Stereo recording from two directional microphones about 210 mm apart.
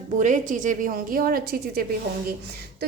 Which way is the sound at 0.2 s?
35° right (ahead or behind).